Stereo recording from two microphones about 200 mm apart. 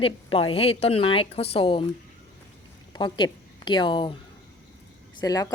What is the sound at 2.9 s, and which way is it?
A woman's voice, 20° left (ahead or behind).